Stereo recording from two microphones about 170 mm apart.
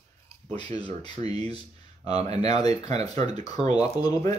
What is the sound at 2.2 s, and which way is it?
Speech, 40° right (ahead or behind).